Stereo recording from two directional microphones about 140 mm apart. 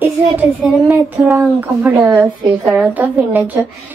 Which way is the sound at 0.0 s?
15° right (ahead or behind).